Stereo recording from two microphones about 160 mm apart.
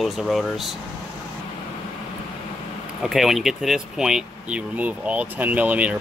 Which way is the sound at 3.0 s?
Centre (ahead or behind).